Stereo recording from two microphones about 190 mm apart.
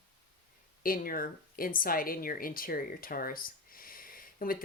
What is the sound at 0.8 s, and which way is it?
Speech, 50° left (ahead or behind).